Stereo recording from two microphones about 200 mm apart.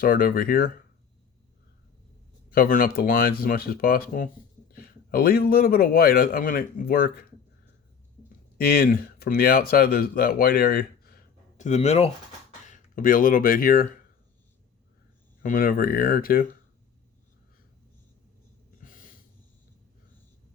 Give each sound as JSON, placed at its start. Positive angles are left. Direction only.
{"t": 0.0, "sound": "a man's voice", "side_deg": 45}
{"t": 2.5, "sound": "a man's voice", "side_deg": 45}
{"t": 8.6, "sound": "speech", "side_deg": 45}
{"t": 15.4, "sound": "a man's voice", "side_deg": 45}
{"t": 18.8, "sound": "snort", "side_deg": 40}